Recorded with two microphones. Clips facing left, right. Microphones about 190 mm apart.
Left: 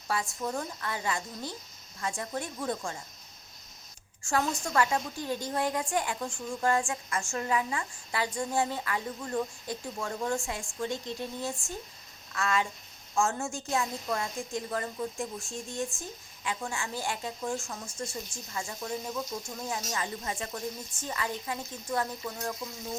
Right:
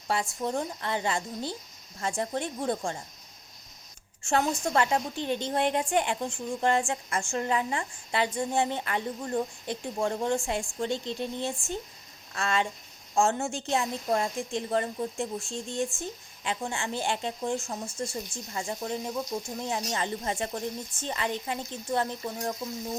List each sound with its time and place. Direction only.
0.1 s a woman's voice: 25° right (ahead or behind)
4.3 s a woman's voice: 25° right (ahead or behind)